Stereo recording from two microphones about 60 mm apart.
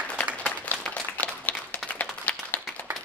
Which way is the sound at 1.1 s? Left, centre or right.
Left.